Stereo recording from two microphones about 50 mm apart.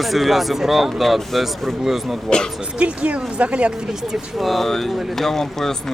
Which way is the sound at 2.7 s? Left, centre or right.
Right.